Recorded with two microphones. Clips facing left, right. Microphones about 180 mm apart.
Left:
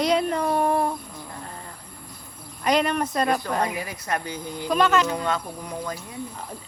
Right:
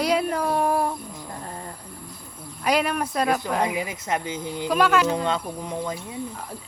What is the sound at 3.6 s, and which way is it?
Speech, 15° right (ahead or behind).